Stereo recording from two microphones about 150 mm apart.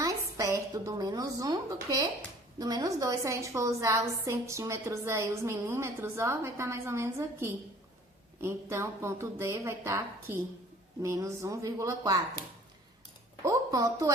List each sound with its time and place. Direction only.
0.0 s a sound: 20° right (ahead or behind)
2.6 s a woman's voice: 25° right (ahead or behind)
13.4 s a woman's voice: 25° right (ahead or behind)